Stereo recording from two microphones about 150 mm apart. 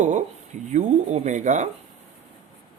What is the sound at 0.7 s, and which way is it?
Speech, 50° right (ahead or behind).